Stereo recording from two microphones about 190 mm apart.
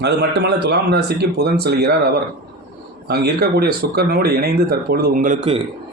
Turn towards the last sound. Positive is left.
turn(degrees=-40)  # may be behind; listen again after turning